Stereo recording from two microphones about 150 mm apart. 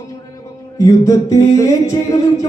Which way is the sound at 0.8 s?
20° left (ahead or behind).